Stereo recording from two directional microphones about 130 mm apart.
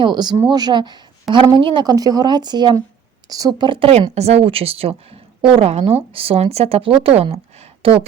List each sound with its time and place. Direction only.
0.0 s a woman's voice: 35° right (ahead or behind)
3.7 s speech: 45° right (ahead or behind)